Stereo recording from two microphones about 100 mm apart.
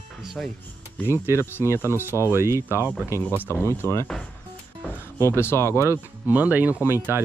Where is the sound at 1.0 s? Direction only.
25° right (ahead or behind).